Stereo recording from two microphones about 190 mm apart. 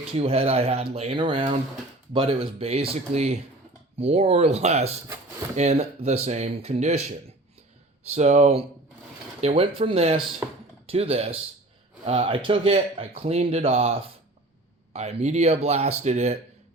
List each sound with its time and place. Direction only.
0.2 s speech: 30° right (ahead or behind)